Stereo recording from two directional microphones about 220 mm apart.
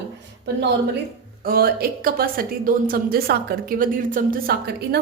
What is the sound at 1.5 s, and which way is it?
A woman's voice, 40° right (ahead or behind).